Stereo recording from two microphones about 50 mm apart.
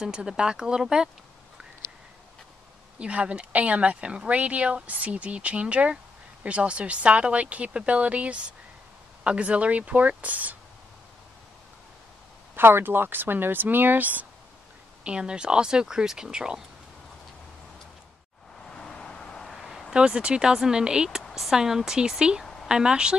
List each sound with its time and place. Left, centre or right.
0.0 s speech: centre
3.0 s speech: right
12.5 s speech: right
15.0 s speech: centre
18.7 s vehicle: centre
19.5 s a sound: centre
19.9 s speech: centre
21.3 s speech: centre